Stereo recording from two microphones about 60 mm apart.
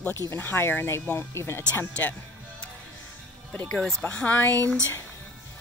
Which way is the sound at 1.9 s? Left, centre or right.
Left.